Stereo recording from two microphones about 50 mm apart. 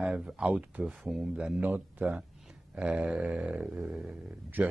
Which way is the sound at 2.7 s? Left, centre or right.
Right.